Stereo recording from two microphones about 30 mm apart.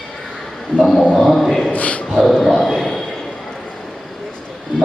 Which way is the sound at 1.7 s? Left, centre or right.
Left.